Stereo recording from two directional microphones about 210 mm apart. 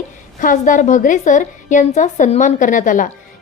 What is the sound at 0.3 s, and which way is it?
A woman's voice, 40° left (ahead or behind).